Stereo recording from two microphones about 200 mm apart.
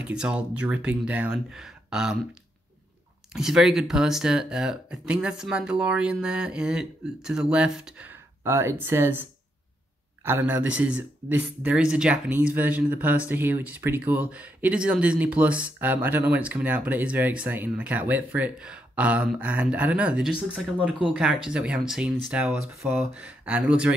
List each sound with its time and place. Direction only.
0.0 s speech: 5° right (ahead or behind)
3.3 s speech: centre (ahead or behind)